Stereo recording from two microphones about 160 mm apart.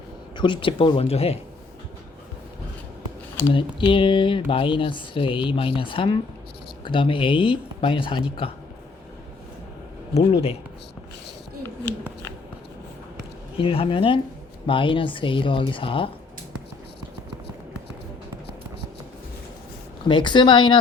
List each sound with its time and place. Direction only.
0.3 s speech: 30° left (ahead or behind)
3.5 s speech: 30° left (ahead or behind)
13.6 s speech: 35° left (ahead or behind)
20.1 s speech: 30° left (ahead or behind)